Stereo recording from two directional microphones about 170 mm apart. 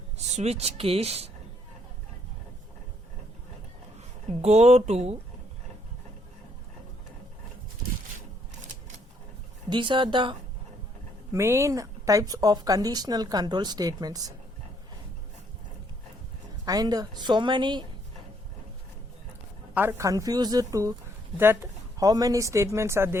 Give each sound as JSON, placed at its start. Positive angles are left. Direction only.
{"t": 0.3, "sound": "speech", "side_deg": -40}
{"t": 4.4, "sound": "speech", "side_deg": -40}
{"t": 9.6, "sound": "speech", "side_deg": -30}
{"t": 11.3, "sound": "speech", "side_deg": -15}
{"t": 16.6, "sound": "speech", "side_deg": -20}
{"t": 19.7, "sound": "a woman's voice", "side_deg": -10}